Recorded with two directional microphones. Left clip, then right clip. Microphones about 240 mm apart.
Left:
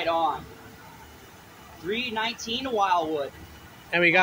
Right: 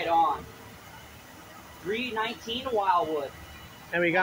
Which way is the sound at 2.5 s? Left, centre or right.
Left.